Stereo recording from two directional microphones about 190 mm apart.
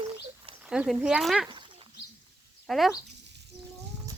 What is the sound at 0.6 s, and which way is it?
Speech, 5° right (ahead or behind).